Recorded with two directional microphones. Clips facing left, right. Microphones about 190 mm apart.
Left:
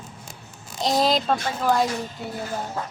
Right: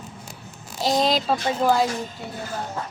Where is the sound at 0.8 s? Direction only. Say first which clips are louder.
Even; centre (ahead or behind).